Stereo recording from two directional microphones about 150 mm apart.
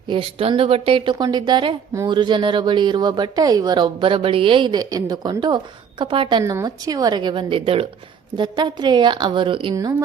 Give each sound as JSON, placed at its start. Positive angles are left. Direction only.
{"t": 0.1, "sound": "a woman's voice", "side_deg": -40}
{"t": 6.4, "sound": "a woman's voice", "side_deg": -20}